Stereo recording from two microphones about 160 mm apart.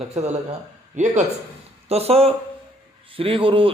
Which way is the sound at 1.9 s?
40° right (ahead or behind).